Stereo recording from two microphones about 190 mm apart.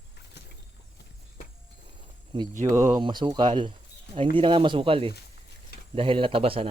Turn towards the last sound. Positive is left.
turn(degrees=-30)  # may be behind; listen again after turning